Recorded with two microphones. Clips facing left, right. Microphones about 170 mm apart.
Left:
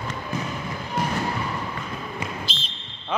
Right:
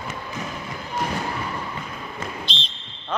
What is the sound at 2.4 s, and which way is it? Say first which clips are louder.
Whistle: even; 5° left (ahead or behind).